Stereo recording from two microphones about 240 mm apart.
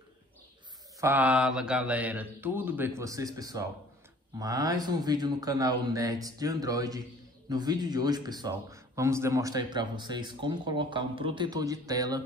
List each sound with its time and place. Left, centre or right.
1.0 s a man's voice: centre